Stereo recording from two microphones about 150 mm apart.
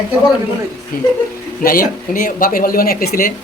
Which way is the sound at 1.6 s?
70° left (ahead or behind).